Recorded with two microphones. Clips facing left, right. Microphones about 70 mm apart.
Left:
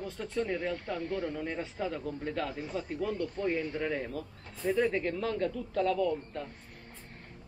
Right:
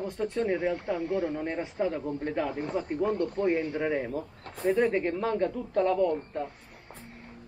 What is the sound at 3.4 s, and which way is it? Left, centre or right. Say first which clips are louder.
Speech: right 4 dB; centre.